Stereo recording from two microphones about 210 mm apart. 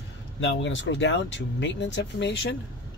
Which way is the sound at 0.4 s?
60° left (ahead or behind).